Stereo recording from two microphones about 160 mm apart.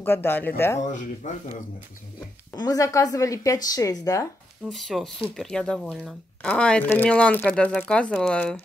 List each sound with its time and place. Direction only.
0.0 s speech: 15° left (ahead or behind)
0.9 s speech: 50° left (ahead or behind)
2.5 s a woman's voice: 25° left (ahead or behind)
4.6 s speech: centre (ahead or behind)